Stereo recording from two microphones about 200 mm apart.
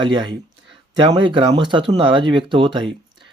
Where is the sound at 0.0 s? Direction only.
25° right (ahead or behind).